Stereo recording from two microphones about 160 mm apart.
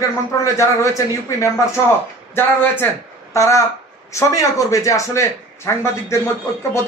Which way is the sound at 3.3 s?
20° left (ahead or behind).